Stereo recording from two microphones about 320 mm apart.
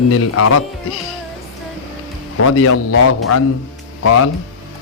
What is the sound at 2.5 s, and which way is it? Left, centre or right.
A man's voice, left.